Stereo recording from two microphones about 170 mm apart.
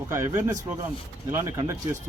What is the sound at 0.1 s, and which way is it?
A man's voice, 15° right (ahead or behind).